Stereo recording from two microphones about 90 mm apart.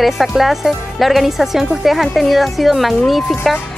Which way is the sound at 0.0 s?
Centre (ahead or behind).